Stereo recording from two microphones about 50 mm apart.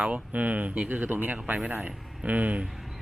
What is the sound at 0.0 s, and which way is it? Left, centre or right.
Speech, right.